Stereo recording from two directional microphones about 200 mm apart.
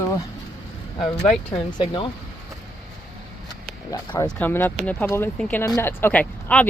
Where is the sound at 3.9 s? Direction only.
20° left (ahead or behind).